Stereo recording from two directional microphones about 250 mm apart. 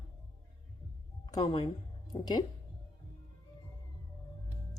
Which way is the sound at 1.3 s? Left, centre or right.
Centre.